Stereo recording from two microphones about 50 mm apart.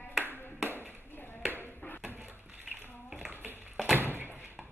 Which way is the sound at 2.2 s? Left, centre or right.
Right.